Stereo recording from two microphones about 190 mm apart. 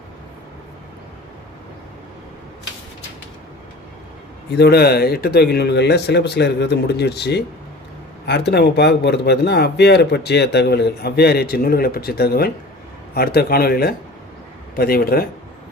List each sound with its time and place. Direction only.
4.5 s speech: 60° left (ahead or behind)